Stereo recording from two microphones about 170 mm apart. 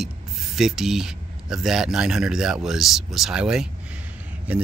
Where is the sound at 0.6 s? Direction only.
5° right (ahead or behind).